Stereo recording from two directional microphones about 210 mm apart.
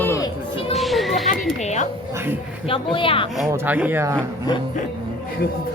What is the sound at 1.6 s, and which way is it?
A woman's voice, 35° left (ahead or behind).